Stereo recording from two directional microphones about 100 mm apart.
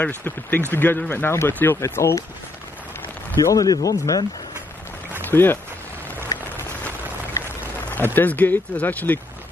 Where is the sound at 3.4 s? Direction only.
35° left (ahead or behind).